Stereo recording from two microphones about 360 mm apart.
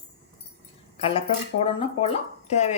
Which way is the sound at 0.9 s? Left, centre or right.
Centre.